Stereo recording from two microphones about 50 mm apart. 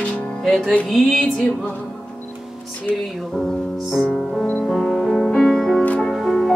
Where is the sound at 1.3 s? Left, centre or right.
Centre.